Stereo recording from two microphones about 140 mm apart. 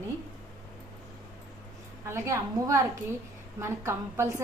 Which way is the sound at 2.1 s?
20° right (ahead or behind).